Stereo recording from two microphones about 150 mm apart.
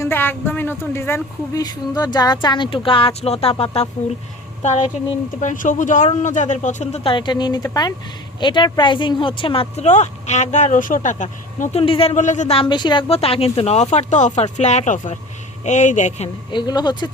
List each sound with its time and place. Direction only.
0.0 s speech: 15° left (ahead or behind); by 3.5 s 45° left (ahead or behind)
4.6 s speech: 50° left (ahead or behind)
7.0 s speech: 35° left (ahead or behind); by 11.8 s 55° left (ahead or behind)
11.8 s speech: 40° left (ahead or behind)
12.5 s speech: 30° left (ahead or behind)
13.9 s speech: 55° left (ahead or behind)
16.5 s speech: 30° left (ahead or behind)